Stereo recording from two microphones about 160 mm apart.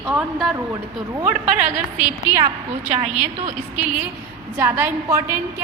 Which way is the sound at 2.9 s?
50° right (ahead or behind).